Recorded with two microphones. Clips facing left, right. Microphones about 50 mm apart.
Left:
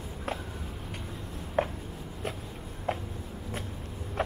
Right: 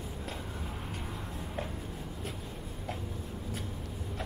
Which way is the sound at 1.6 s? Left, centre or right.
Left.